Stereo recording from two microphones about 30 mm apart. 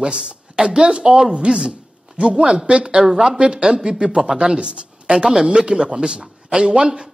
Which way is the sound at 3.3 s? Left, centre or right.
Right.